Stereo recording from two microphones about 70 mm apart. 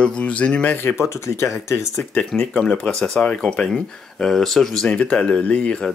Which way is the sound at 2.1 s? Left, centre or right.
Centre.